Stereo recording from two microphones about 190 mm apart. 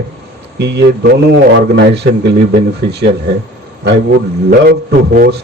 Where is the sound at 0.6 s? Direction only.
65° right (ahead or behind).